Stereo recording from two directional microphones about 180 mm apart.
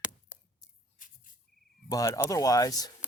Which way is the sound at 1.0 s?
45° left (ahead or behind).